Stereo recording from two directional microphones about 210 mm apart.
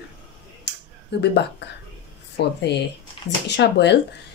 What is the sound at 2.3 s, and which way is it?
Speech, 55° left (ahead or behind).